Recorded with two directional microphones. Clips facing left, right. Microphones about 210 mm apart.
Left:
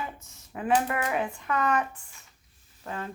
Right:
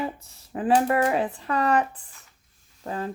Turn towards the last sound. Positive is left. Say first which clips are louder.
# right 5 dB
turn(degrees=-35)  # may be behind; listen again after turning